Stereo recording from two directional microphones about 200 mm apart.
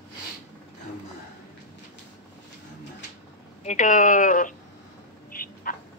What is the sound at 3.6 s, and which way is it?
Speech, 40° left (ahead or behind).